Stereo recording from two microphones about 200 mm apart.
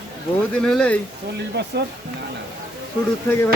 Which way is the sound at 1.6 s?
60° right (ahead or behind).